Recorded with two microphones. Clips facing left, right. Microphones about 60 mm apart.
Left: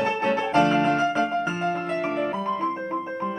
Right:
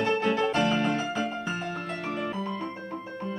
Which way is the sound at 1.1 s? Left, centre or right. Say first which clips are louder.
Left 6 dB; left.